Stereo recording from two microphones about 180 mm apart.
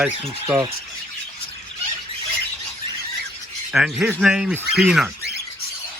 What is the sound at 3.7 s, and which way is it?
Speech, 5° right (ahead or behind).